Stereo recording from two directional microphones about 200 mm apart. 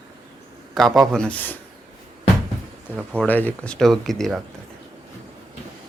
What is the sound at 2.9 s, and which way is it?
Speech, 5° right (ahead or behind).